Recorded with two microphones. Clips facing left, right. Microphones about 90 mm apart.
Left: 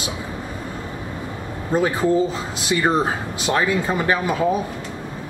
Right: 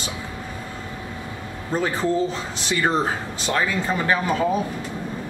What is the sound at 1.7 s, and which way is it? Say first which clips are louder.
Speech: left 4 dB; 10° left (ahead or behind).